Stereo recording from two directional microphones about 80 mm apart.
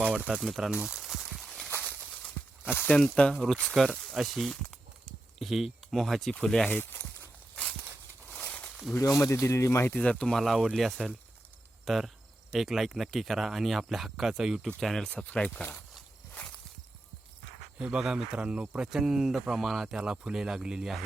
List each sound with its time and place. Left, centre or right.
0.0 s a sound: centre
0.3 s a sound: centre
2.8 s speech: centre
3.3 s speech: centre
6.7 s speech: left
8.3 s a sound: centre
9.0 s speech: left
10.1 s speech: centre
10.3 s speech: centre
14.8 s speech: centre
15.1 s speech: centre
17.7 s speech: centre